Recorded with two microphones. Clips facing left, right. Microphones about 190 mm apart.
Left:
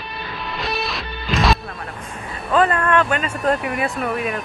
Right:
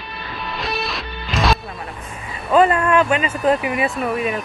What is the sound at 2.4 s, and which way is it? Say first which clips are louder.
Speech: right 3 dB; 5° right (ahead or behind).